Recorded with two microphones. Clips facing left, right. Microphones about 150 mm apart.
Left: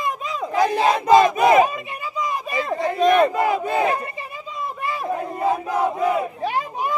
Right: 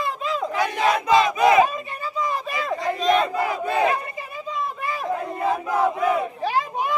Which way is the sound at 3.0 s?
55° left (ahead or behind).